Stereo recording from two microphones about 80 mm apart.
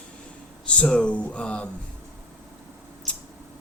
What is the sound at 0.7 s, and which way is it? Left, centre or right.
Speech, centre.